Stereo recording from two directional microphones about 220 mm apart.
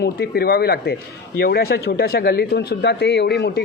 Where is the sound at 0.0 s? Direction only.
45° left (ahead or behind).